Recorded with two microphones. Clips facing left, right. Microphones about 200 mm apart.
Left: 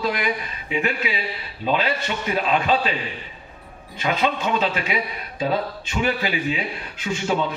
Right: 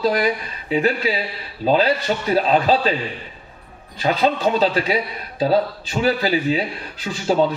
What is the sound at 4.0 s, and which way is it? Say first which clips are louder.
A man's voice: right 4 dB; 35° right (ahead or behind).